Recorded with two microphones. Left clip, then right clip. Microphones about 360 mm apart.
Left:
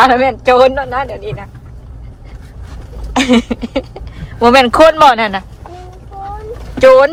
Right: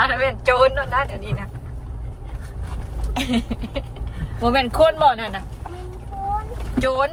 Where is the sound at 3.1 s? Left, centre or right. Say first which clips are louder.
Left 12 dB; centre.